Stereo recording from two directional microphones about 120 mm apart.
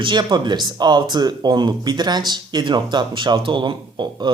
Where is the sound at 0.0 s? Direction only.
35° right (ahead or behind).